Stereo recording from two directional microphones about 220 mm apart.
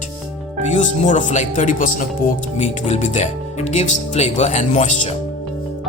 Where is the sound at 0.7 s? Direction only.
35° left (ahead or behind).